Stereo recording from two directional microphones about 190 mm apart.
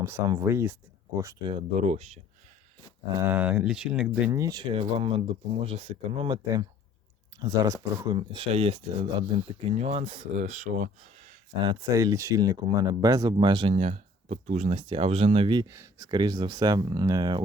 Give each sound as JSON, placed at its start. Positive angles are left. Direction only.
{"t": 0.0, "sound": "speech", "side_deg": -15}
{"t": 1.8, "sound": "speech", "side_deg": -35}
{"t": 3.2, "sound": "speech", "side_deg": -10}
{"t": 4.3, "sound": "speech", "side_deg": -15}
{"t": 11.6, "sound": "speech", "side_deg": -25}